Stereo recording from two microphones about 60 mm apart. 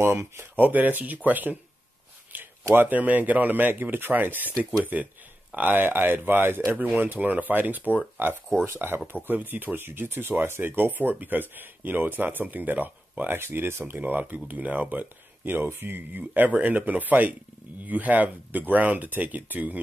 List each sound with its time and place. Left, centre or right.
0.0 s speech: right
0.6 s speech: right
2.7 s speech: right
13.9 s speech: right